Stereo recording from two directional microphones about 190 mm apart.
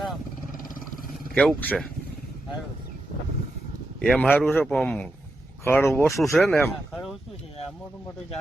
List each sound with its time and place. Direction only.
1.4 s a man's voice: 5° left (ahead or behind)
4.0 s a man's voice: 5° left (ahead or behind)
6.3 s speech: 5° left (ahead or behind)